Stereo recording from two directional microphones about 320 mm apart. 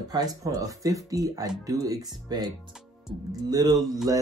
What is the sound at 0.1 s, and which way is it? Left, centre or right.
Speech, centre.